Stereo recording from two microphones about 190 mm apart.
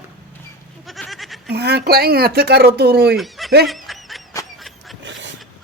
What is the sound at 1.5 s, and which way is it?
Speech, 60° right (ahead or behind).